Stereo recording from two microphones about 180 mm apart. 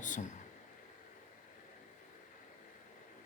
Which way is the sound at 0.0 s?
45° left (ahead or behind).